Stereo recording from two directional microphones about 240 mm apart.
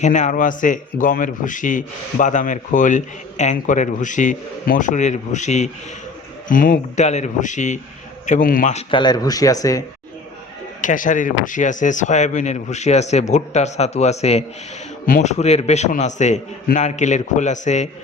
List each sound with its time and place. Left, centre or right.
0.0 s a man's voice: left
8.9 s speech: centre
10.8 s speech: left